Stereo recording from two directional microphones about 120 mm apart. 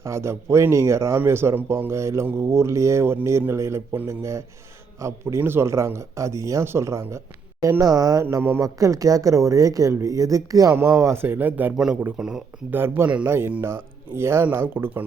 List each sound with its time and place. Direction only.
0.0 s a man's voice: 25° right (ahead or behind); by 12.4 s 5° right (ahead or behind)
12.7 s speech: 20° right (ahead or behind)